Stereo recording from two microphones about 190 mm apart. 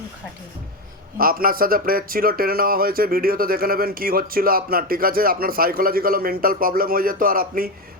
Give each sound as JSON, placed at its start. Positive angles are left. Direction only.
{"t": 1.2, "sound": "speech", "side_deg": -50}